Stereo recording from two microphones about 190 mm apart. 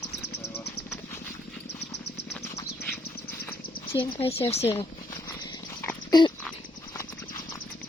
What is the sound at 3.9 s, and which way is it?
Speech, 30° left (ahead or behind).